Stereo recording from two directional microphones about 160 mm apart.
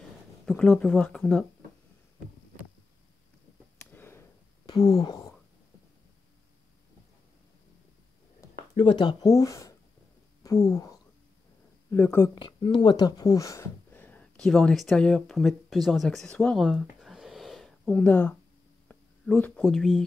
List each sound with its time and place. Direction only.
0.5 s speech: 5° left (ahead or behind)
3.8 s a sound: 15° left (ahead or behind)
4.6 s speech: 35° left (ahead or behind)
8.9 s speech: 25° left (ahead or behind)
12.4 s speech: 30° left (ahead or behind); by 20.0 s centre (ahead or behind)